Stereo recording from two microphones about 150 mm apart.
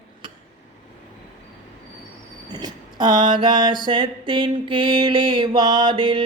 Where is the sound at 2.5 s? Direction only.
30° right (ahead or behind).